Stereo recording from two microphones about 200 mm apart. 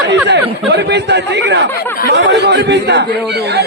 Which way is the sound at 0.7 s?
60° right (ahead or behind).